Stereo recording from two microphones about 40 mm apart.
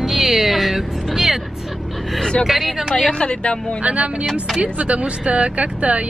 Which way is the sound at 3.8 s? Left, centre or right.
Right.